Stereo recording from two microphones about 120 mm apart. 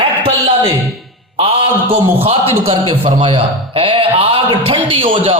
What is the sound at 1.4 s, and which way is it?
A man's voice, 50° right (ahead or behind).